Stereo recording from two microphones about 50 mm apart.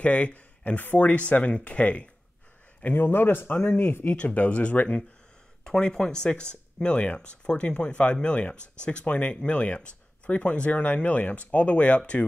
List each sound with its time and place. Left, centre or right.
0.0 s speech: left
2.8 s speech: left
4.2 s speech: left